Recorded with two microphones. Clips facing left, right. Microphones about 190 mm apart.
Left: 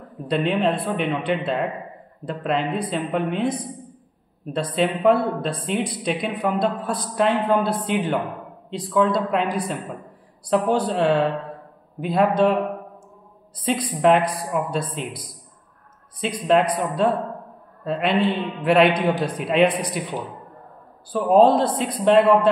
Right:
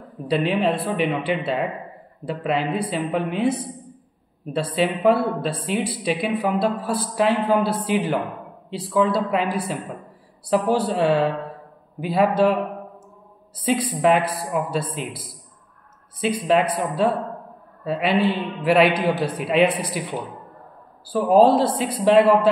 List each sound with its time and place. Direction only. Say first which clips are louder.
0.3 s a man's voice: even; 5° right (ahead or behind)
13.6 s a man's voice: right 1 dB; 5° right (ahead or behind)
21.1 s a man's voice: even; 5° right (ahead or behind)